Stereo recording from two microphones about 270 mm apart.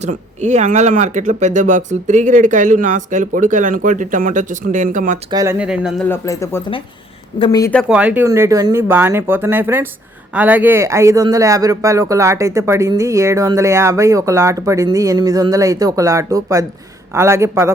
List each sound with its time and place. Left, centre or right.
0.0 s speech: right
5.3 s speech: centre
6.1 s speech: centre